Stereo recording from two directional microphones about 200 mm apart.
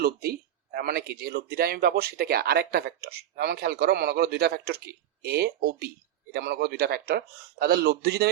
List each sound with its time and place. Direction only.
0.0 s speech: 50° right (ahead or behind)